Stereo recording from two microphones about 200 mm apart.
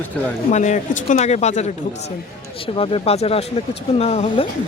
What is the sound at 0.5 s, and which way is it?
Speech, 35° left (ahead or behind).